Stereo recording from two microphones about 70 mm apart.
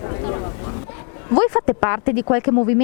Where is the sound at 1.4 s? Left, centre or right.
Left.